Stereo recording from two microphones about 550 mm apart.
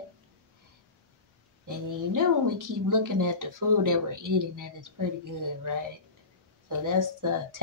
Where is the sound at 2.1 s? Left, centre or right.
Right.